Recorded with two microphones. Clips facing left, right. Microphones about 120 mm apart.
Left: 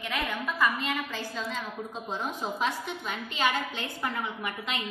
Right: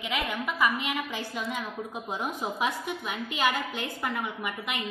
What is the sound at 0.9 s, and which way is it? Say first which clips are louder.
A woman's voice: even; 15° right (ahead or behind).